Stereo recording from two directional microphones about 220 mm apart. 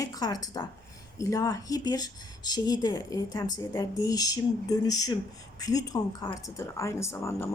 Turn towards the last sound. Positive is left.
turn(degrees=15)  # may be behind; listen again after turning